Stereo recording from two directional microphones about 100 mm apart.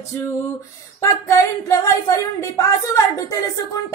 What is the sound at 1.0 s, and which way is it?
Speech, 30° left (ahead or behind).